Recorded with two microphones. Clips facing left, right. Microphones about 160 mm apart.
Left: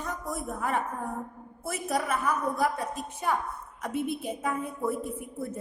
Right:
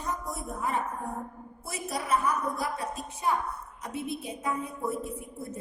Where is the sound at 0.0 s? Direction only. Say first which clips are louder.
Left 1 dB; 55° left (ahead or behind).